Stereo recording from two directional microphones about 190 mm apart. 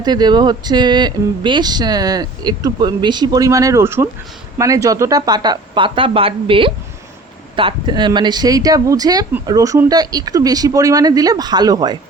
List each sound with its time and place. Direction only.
0.0 s speech: 20° right (ahead or behind)